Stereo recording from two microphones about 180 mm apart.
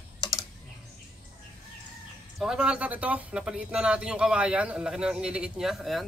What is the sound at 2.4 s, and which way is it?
Speech, 5° right (ahead or behind).